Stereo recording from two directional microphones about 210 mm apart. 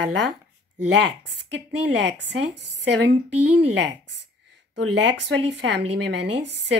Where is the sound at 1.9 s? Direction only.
55° right (ahead or behind).